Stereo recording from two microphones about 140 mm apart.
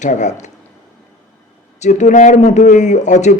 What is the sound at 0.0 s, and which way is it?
Speech, 55° left (ahead or behind).